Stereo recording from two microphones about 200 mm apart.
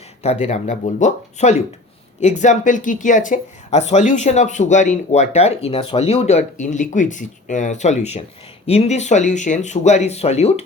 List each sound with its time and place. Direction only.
0.2 s speech: 35° left (ahead or behind)